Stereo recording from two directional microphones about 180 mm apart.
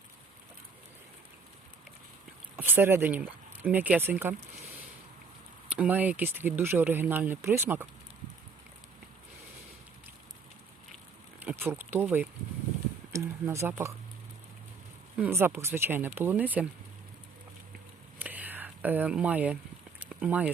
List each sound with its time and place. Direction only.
2.6 s speech: 10° right (ahead or behind)
5.6 s speech: 5° right (ahead or behind)
11.3 s speech: 10° right (ahead or behind)
15.2 s speech: 10° right (ahead or behind)
18.2 s whispering: 10° right (ahead or behind)
20.0 s a sound: 10° right (ahead or behind)